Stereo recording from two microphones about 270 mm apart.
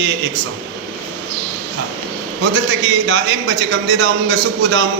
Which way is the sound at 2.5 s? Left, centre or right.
Right.